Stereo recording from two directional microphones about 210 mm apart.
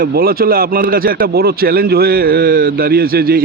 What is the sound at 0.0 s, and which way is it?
Speech, 45° right (ahead or behind).